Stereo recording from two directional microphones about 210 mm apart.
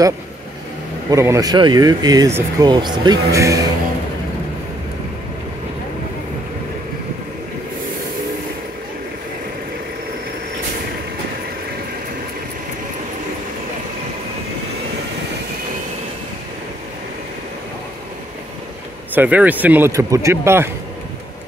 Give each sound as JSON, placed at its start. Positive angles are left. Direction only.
{"t": 1.1, "sound": "speech", "side_deg": -15}
{"t": 19.1, "sound": "a man's voice", "side_deg": -10}